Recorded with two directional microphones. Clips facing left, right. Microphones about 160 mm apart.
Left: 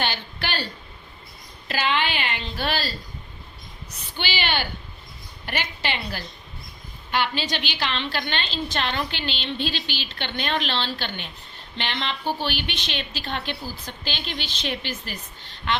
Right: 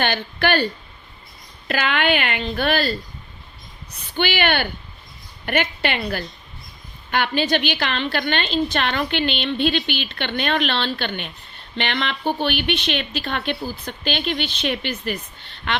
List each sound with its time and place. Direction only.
0.0 s a woman's voice: 55° right (ahead or behind)
4.2 s a woman's voice: 55° right (ahead or behind)